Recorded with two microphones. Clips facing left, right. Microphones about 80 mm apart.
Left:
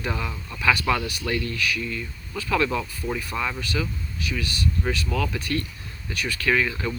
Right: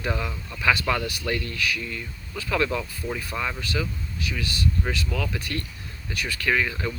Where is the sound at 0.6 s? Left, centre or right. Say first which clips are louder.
Left 1 dB; right.